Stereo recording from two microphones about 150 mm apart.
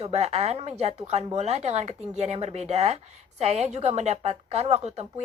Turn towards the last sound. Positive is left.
turn(degrees=-45)  # may be behind; listen again after turning